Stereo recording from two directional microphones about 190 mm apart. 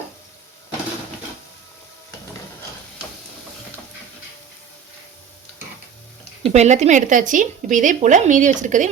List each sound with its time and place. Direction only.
6.4 s speech: 35° right (ahead or behind)